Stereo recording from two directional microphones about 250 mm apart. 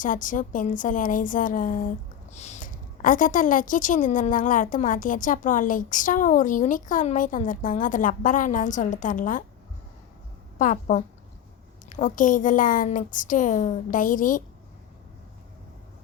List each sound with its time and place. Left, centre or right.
0.0 s a woman's voice: left
10.6 s a woman's voice: left